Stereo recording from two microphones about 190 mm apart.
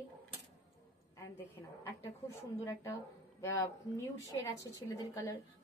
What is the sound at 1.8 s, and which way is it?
A woman's voice, 15° left (ahead or behind).